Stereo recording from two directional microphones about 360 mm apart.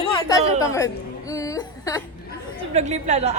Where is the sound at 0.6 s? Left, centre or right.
Centre.